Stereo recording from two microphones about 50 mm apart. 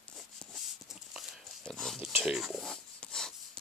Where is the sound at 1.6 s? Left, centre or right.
Centre.